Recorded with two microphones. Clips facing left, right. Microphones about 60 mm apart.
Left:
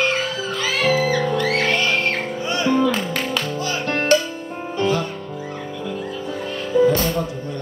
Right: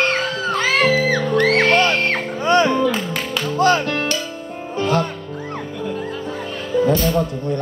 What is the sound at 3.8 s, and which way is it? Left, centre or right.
Music, left.